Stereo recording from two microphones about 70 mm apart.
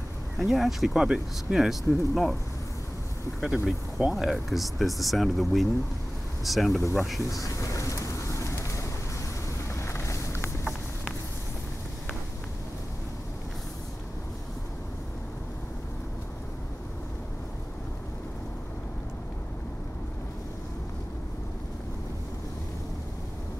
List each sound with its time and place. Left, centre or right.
0.4 s speech: centre
3.3 s speech: centre
7.2 s train: left
9.8 s vehicle: left